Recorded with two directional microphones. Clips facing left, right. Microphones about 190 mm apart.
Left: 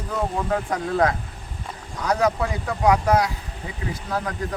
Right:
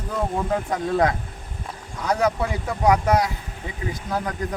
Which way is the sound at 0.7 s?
20° right (ahead or behind).